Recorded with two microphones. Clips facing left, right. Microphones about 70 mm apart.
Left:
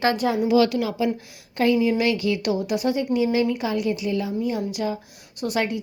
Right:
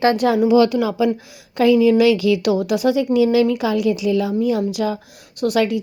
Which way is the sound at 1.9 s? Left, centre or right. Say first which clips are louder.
Right 8 dB; right.